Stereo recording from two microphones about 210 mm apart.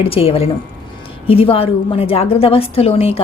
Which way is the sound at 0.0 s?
25° left (ahead or behind).